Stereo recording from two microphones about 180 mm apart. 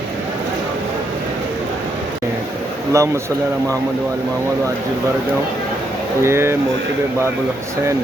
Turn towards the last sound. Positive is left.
turn(degrees=-15)  # may be behind; listen again after turning